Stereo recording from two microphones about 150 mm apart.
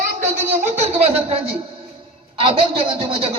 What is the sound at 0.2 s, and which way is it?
A woman's voice, 50° right (ahead or behind).